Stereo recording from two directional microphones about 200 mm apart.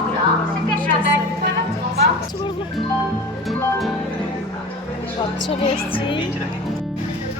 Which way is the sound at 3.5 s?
Centre (ahead or behind).